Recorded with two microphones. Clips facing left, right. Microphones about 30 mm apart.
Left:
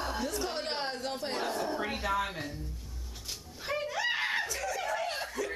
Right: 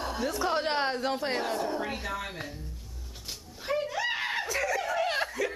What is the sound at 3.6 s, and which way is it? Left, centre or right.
Screaming, centre.